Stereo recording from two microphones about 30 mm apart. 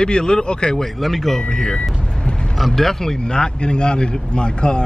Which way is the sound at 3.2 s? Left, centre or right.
Left.